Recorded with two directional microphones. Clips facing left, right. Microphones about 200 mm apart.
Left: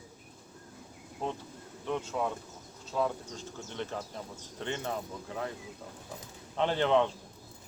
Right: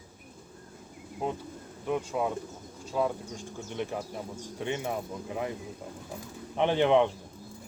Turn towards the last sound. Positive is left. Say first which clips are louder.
# right 3 dB
turn(degrees=-15)  # may be behind; listen again after turning